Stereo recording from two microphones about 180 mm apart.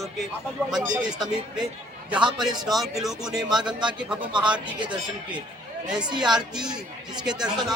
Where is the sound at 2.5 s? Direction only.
20° right (ahead or behind).